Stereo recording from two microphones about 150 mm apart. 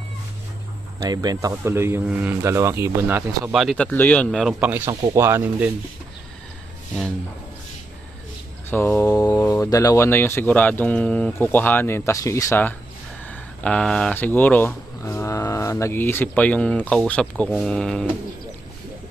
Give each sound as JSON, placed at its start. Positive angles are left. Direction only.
{"t": 1.0, "sound": "speech", "side_deg": -25}
{"t": 3.5, "sound": "speech", "side_deg": 5}
{"t": 8.6, "sound": "mantra", "side_deg": 15}
{"t": 9.5, "sound": "speech", "side_deg": 20}